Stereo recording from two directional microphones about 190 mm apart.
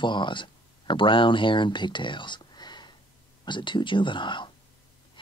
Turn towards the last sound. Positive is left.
turn(degrees=25)  # may be behind; listen again after turning